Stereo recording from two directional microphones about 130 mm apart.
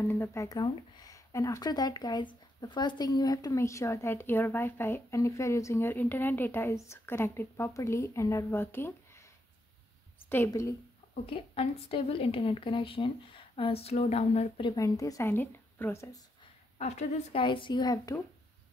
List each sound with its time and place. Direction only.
0.0 s speech: 15° left (ahead or behind)
10.3 s speech: 20° left (ahead or behind)
11.2 s speech: 45° left (ahead or behind)
14.6 s speech: 30° left (ahead or behind)
16.7 s a woman's voice: 55° left (ahead or behind)
17.4 s a child's voice: 40° left (ahead or behind)